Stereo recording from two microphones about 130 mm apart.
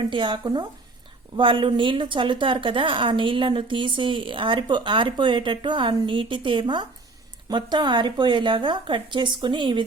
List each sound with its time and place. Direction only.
0.1 s a woman's voice: 35° right (ahead or behind)